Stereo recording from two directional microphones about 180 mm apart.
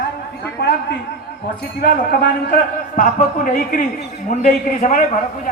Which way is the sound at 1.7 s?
60° left (ahead or behind).